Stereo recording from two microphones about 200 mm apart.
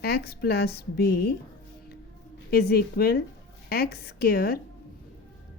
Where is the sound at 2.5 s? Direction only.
50° left (ahead or behind).